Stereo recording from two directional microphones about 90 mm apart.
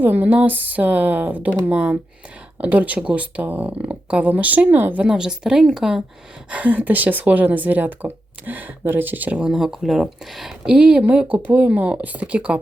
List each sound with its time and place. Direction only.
0.0 s speech: 20° right (ahead or behind)
6.5 s speech: 15° right (ahead or behind)